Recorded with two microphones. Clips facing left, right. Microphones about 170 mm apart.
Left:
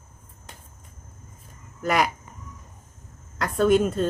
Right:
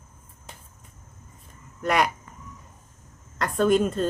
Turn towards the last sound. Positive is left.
turn(degrees=0)  # may be behind; listen again after turning